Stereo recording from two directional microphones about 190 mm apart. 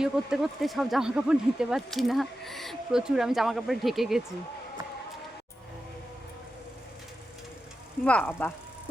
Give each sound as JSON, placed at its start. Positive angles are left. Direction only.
{"t": 0.0, "sound": "speech", "side_deg": -5}
{"t": 8.0, "sound": "speech", "side_deg": 10}